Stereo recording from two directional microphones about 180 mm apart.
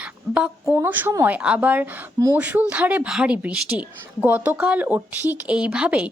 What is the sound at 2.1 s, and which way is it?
Speech, 20° right (ahead or behind).